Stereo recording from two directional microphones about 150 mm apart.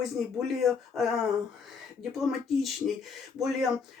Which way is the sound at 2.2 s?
Centre (ahead or behind).